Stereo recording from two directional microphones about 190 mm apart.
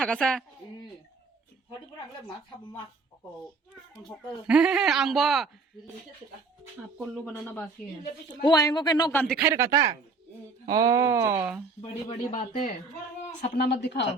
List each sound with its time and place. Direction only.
0.0 s speech: 5° left (ahead or behind)
4.0 s speech: 5° right (ahead or behind)
7.0 s speech: centre (ahead or behind)
8.3 s a man's voice: 20° left (ahead or behind)
9.1 s speech: 5° left (ahead or behind)
9.4 s speech: 10° right (ahead or behind)
10.7 s speech: 20° right (ahead or behind)
11.8 s speech: 30° left (ahead or behind)
13.6 s speech: 60° left (ahead or behind)